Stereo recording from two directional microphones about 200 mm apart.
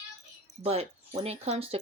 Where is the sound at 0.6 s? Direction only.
30° right (ahead or behind).